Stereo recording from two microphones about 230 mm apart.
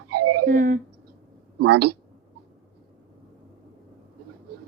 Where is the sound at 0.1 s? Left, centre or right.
Right.